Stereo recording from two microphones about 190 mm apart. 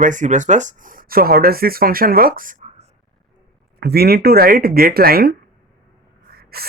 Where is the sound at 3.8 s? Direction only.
55° right (ahead or behind).